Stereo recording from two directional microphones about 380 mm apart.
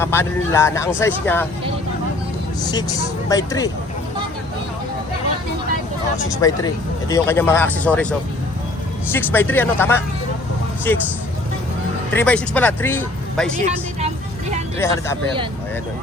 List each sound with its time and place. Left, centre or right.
0.0 s speech: centre
2.6 s speech: centre
6.4 s speech: centre
9.1 s speech: centre
12.1 s speech: centre
14.8 s speech: centre